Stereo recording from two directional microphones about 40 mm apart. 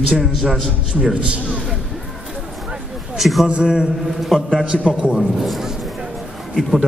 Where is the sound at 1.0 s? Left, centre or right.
Right.